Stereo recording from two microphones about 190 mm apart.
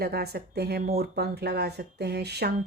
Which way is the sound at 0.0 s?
55° right (ahead or behind).